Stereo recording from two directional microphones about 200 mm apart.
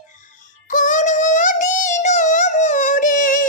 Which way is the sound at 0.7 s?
40° left (ahead or behind).